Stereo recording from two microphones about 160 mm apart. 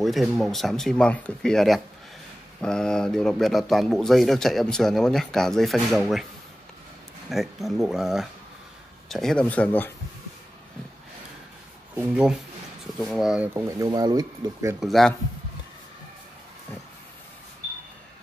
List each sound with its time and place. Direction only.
0.0 s speech: centre (ahead or behind)
7.2 s speech: centre (ahead or behind)
11.9 s speech: 10° right (ahead or behind)
13.5 s speech: 20° right (ahead or behind)
14.8 s speech: centre (ahead or behind)